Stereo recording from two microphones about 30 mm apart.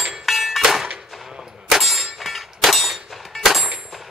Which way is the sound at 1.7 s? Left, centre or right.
Centre.